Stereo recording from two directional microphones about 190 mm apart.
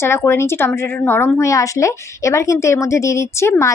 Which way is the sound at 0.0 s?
15° left (ahead or behind).